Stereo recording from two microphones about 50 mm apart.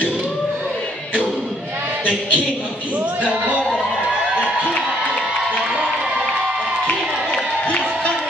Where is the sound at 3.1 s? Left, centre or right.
Right.